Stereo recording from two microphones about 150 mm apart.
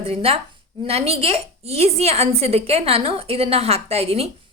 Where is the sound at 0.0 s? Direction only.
40° right (ahead or behind).